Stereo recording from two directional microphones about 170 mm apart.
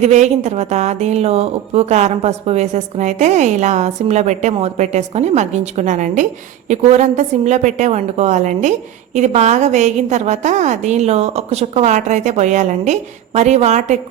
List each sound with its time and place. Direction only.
0.0 s a woman's voice: 40° right (ahead or behind)